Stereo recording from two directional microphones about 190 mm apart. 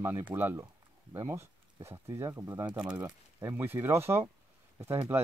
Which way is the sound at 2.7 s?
5° right (ahead or behind).